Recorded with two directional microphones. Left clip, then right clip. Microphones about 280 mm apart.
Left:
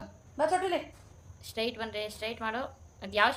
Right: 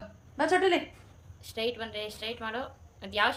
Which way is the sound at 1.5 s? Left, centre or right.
Centre.